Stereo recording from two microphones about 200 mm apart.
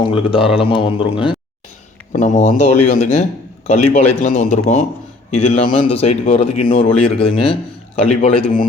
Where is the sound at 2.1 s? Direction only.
40° left (ahead or behind).